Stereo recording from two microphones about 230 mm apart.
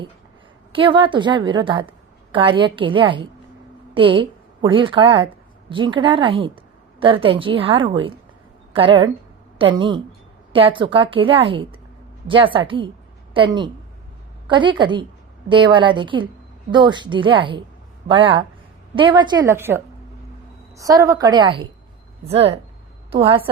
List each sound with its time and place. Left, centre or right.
0.7 s a woman's voice: right